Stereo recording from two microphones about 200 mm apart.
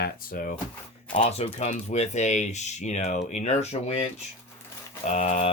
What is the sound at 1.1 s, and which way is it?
Speech, 30° left (ahead or behind).